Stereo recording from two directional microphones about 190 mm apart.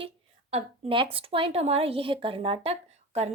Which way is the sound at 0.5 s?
30° right (ahead or behind).